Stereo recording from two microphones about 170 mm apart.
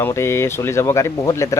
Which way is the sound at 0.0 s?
15° left (ahead or behind).